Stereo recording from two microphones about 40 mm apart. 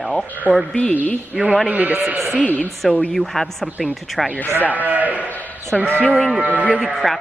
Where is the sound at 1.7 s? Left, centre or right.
Right.